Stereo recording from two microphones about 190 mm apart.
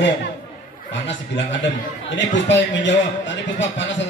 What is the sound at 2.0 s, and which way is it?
A man's voice, 70° left (ahead or behind).